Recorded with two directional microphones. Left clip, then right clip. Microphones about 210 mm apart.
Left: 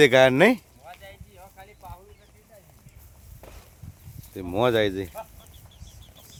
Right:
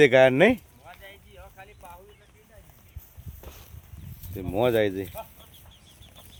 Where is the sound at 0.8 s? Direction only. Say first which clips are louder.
Left 2 dB; 55° left (ahead or behind).